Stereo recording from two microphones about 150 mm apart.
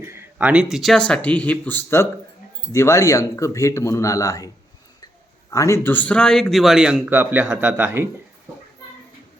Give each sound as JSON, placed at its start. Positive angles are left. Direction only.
{"t": 0.0, "sound": "speech", "side_deg": -15}